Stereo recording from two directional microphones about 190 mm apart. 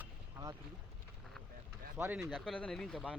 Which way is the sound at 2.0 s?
10° right (ahead or behind).